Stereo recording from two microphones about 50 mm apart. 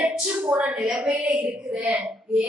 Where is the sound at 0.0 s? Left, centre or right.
Right.